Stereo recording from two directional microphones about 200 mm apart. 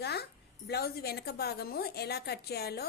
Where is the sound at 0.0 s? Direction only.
55° left (ahead or behind).